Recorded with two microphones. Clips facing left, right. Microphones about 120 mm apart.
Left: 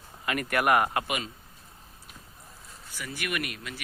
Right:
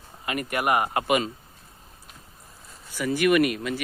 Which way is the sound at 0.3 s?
15° right (ahead or behind).